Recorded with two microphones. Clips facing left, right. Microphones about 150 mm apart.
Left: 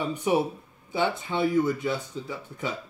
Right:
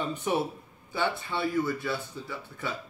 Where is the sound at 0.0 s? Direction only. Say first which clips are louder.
Left 4 dB; 10° left (ahead or behind).